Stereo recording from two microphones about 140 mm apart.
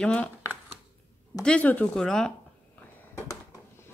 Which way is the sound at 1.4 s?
10° left (ahead or behind).